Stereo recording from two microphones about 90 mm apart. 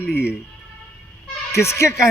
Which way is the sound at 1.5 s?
35° left (ahead or behind).